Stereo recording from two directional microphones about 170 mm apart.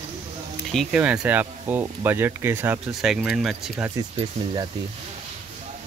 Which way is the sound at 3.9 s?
30° right (ahead or behind).